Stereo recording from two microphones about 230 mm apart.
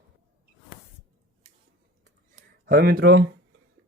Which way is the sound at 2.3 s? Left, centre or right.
Right.